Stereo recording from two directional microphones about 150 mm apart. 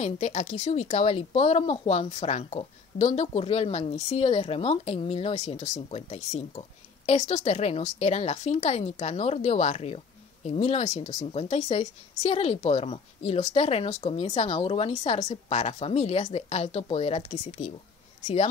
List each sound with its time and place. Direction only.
0.0 s a woman's voice: 50° left (ahead or behind)